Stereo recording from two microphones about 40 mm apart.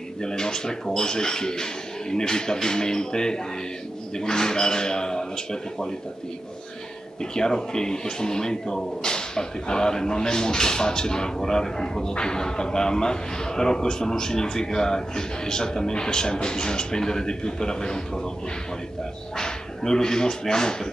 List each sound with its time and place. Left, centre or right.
0.2 s speech: centre
7.2 s speech: centre
19.3 s speech: centre